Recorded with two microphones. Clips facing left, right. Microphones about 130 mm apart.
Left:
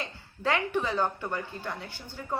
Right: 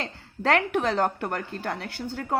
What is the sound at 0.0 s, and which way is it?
A woman's voice, 70° right (ahead or behind).